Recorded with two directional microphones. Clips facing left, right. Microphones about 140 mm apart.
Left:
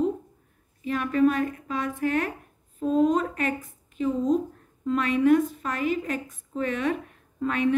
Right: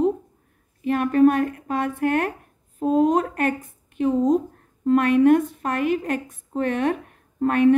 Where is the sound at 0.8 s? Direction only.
55° right (ahead or behind).